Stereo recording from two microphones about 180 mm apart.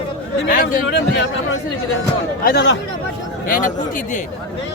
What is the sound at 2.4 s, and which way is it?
Speech, 75° left (ahead or behind).